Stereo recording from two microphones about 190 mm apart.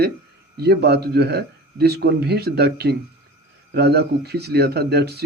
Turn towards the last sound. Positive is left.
turn(degrees=-60)  # may be behind; listen again after turning